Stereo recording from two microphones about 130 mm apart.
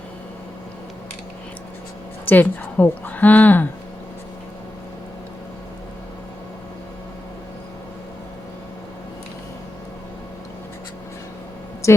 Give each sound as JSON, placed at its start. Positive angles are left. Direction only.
{"t": 2.2, "sound": "a woman's voice", "side_deg": 15}
{"t": 11.8, "sound": "a woman's voice", "side_deg": 20}